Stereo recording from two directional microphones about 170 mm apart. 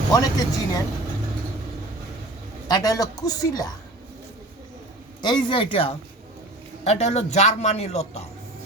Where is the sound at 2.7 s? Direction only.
20° left (ahead or behind).